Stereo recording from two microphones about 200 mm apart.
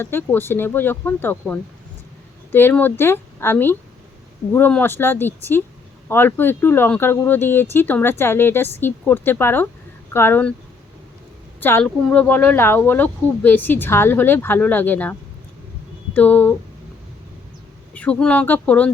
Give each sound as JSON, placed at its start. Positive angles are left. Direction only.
{"t": 0.0, "sound": "speech", "side_deg": 10}
{"t": 11.6, "sound": "speech", "side_deg": 10}
{"t": 16.1, "sound": "speech", "side_deg": 10}
{"t": 17.9, "sound": "speech", "side_deg": 5}